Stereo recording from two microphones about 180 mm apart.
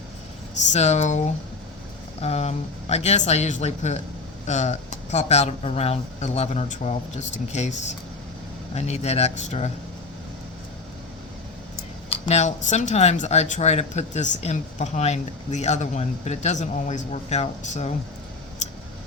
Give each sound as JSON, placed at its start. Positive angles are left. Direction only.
{"t": 0.7, "sound": "speech", "side_deg": 40}
{"t": 8.7, "sound": "speech", "side_deg": 35}
{"t": 12.0, "sound": "speech", "side_deg": 35}